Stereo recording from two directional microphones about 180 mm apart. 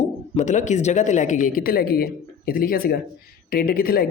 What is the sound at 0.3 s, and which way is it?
Speech, 40° left (ahead or behind).